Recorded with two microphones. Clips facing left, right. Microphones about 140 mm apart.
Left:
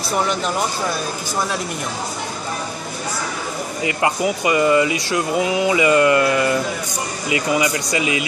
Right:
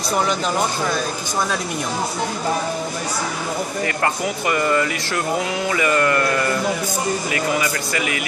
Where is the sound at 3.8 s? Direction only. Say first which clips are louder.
Left 4 dB; 15° left (ahead or behind).